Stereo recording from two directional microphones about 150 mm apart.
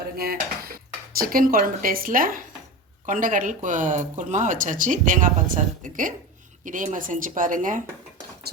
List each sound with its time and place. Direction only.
0.0 s dishes: 90° right; by 2.4 s 70° right (ahead or behind)
3.1 s speech: 60° right (ahead or behind)
8.5 s a sound: 90° right